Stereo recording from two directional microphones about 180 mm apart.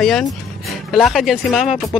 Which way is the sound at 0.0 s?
Centre (ahead or behind).